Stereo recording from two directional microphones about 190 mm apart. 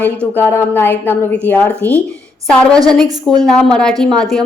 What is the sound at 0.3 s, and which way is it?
A woman's voice, 10° left (ahead or behind).